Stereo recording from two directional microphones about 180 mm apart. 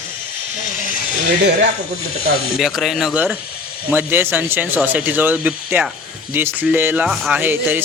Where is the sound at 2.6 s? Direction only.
Centre (ahead or behind).